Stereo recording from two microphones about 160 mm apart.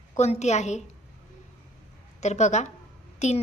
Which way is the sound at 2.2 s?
45° left (ahead or behind).